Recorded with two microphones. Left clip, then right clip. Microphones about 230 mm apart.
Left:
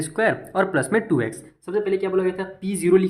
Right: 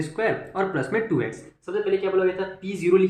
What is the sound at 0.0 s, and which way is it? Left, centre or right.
A man's voice, left.